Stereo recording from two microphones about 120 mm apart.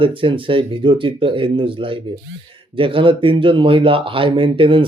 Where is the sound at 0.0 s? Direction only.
45° right (ahead or behind).